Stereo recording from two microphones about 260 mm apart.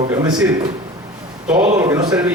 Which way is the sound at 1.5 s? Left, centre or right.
Right.